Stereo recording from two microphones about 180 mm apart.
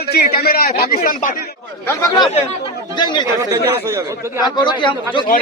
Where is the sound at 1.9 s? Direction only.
20° left (ahead or behind).